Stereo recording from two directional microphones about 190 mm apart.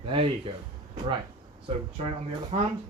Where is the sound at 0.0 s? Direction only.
30° right (ahead or behind).